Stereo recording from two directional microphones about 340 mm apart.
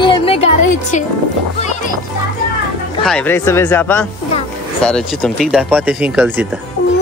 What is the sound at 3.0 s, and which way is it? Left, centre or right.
Speech, centre.